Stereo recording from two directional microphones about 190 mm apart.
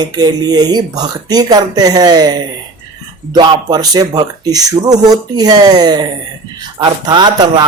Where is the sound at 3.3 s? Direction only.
20° right (ahead or behind).